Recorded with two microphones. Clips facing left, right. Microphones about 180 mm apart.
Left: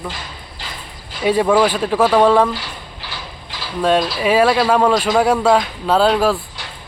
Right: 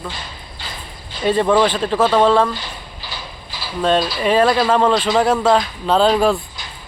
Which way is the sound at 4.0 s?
Centre (ahead or behind).